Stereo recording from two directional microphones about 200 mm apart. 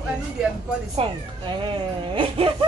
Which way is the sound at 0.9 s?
25° right (ahead or behind).